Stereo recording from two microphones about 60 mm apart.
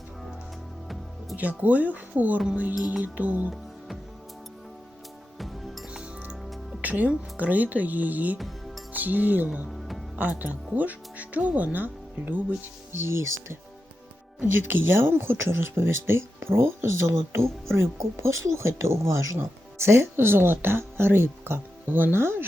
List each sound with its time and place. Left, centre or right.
1.4 s speech: right
5.4 s music: centre
5.9 s music: centre
6.4 s music: centre
6.8 s a woman's voice: right
8.4 s music: centre
8.9 s speech: right
12.9 s speech: right